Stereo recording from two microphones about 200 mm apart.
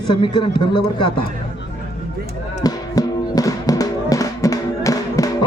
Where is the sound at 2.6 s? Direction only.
20° left (ahead or behind).